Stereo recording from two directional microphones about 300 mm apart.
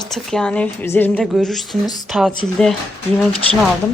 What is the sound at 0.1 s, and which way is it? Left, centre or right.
A woman's voice, centre.